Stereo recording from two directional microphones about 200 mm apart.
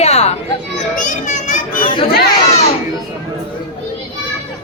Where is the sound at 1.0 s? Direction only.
40° left (ahead or behind).